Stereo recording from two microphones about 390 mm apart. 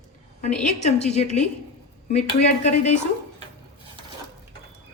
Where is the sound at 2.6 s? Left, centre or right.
Centre.